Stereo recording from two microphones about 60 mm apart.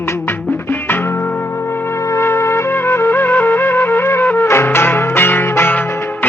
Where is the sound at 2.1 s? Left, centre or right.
Left.